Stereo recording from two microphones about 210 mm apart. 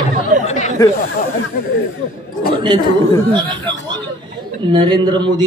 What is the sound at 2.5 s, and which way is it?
Speech, 20° right (ahead or behind).